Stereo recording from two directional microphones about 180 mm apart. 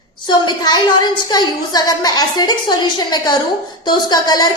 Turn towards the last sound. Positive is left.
turn(degrees=25)  # may be behind; listen again after turning